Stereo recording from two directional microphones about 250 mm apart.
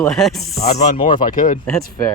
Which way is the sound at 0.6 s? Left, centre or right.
Left.